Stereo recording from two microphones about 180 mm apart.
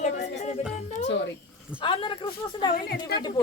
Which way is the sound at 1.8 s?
30° left (ahead or behind).